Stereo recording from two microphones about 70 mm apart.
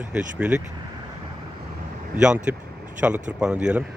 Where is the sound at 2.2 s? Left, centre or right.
Centre.